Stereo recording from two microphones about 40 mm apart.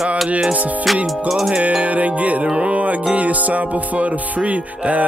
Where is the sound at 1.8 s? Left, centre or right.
Right.